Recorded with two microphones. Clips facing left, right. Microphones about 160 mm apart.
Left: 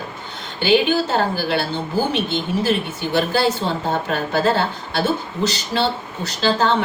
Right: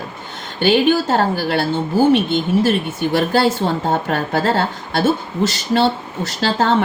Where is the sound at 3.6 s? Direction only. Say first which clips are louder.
Right 3 dB; 55° right (ahead or behind).